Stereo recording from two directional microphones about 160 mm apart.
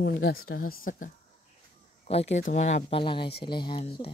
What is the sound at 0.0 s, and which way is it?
Speech, 80° left.